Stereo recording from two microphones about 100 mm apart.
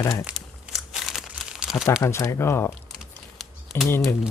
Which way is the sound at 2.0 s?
25° left (ahead or behind).